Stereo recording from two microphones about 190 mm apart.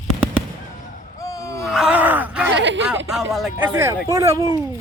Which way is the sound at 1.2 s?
15° left (ahead or behind).